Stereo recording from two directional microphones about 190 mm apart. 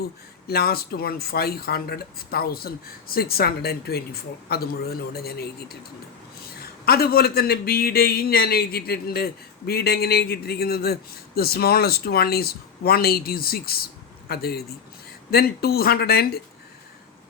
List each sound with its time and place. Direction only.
0.4 s a man's voice: 55° left (ahead or behind)